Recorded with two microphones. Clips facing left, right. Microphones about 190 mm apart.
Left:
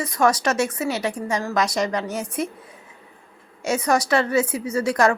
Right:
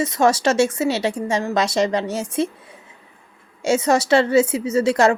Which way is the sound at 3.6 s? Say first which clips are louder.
Right 3 dB; 25° right (ahead or behind).